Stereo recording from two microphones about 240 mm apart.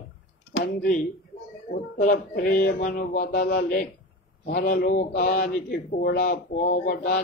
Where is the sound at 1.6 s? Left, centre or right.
Left.